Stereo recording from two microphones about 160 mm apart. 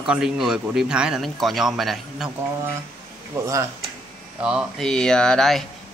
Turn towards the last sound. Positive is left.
turn(degrees=5)  # may be behind; listen again after turning